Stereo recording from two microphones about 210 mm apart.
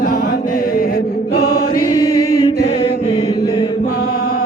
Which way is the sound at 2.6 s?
25° left (ahead or behind).